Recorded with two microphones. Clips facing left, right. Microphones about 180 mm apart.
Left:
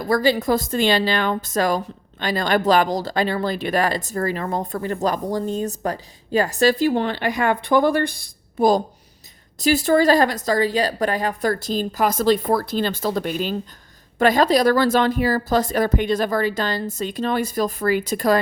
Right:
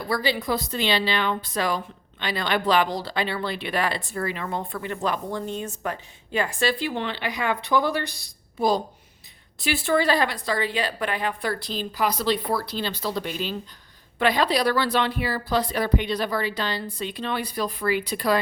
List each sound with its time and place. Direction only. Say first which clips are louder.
0.0 s a woman's voice: left 7 dB; 45° left (ahead or behind)